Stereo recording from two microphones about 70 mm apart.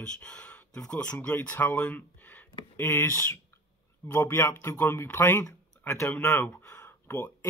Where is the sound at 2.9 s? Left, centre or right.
Left.